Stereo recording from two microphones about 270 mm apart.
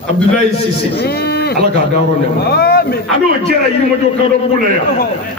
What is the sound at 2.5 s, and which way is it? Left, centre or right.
Speech, left.